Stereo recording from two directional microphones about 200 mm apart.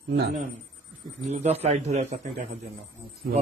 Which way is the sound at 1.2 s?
35° right (ahead or behind).